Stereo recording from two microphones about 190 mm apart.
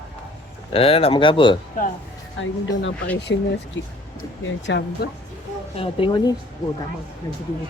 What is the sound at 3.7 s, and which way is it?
Speech, 75° left (ahead or behind).